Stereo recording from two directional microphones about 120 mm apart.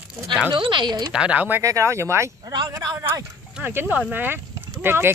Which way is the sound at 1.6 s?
25° right (ahead or behind).